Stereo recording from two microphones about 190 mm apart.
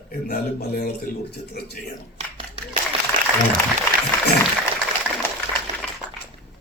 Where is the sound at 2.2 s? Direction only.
30° right (ahead or behind).